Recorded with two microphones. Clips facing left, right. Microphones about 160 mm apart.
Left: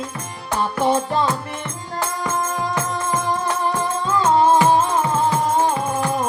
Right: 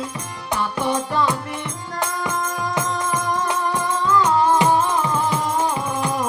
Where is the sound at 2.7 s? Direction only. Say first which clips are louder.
Even; 15° right (ahead or behind).